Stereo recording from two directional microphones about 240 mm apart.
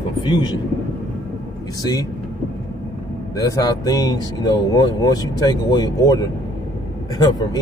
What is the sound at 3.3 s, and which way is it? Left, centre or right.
Speech, centre.